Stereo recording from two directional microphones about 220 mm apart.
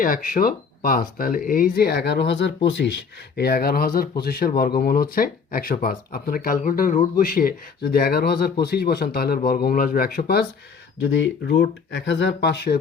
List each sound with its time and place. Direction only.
0.0 s speech: 40° left (ahead or behind)